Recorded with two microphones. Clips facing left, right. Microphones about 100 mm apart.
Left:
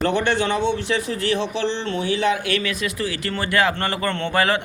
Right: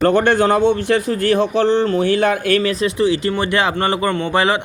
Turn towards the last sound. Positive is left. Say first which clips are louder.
# right 4 dB
turn(degrees=-20)  # may be behind; listen again after turning